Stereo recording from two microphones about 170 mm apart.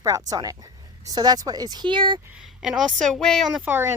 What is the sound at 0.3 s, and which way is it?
Speech, 20° right (ahead or behind).